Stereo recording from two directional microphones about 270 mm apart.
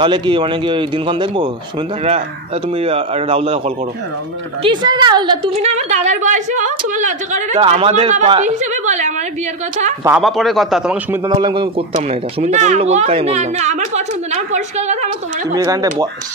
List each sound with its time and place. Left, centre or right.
0.0 s speech: centre
2.7 s a woman's voice: right
10.0 s a man's voice: centre
11.2 s a woman's voice: centre
15.5 s speech: centre